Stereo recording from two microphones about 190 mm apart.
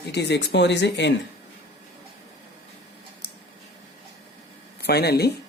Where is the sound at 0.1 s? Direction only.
65° left (ahead or behind).